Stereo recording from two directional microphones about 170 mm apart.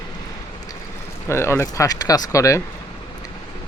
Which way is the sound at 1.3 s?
15° left (ahead or behind).